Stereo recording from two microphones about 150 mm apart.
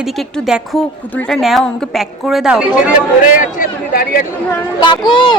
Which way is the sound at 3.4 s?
60° left (ahead or behind).